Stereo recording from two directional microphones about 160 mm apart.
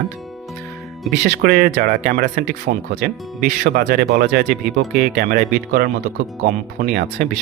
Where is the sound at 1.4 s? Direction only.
70° right (ahead or behind).